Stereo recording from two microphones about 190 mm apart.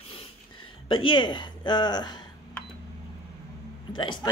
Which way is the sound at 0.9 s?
25° left (ahead or behind).